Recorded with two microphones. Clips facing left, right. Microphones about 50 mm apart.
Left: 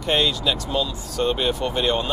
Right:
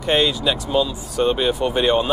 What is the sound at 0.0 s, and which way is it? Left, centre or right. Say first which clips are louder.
Speech: right 3 dB; centre.